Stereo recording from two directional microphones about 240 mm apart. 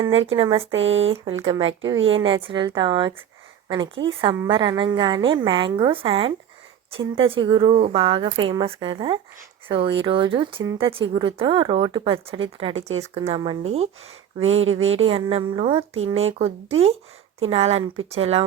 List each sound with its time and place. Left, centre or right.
0.3 s speech: right
0.7 s speech: right
1.1 s speech: right
2.0 s speech: right
2.2 s speech: right
14.4 s speech: right
15.0 s speech: right